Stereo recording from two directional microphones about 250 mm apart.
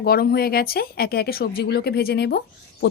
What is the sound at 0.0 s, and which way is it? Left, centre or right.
Speech, left.